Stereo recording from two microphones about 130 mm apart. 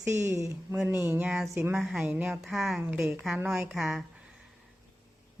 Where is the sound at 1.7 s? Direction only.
Centre (ahead or behind).